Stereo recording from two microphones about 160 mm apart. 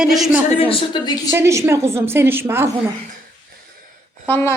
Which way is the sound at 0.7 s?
30° left (ahead or behind).